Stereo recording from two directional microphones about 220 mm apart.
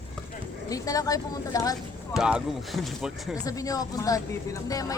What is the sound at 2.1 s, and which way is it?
Speech, centre (ahead or behind).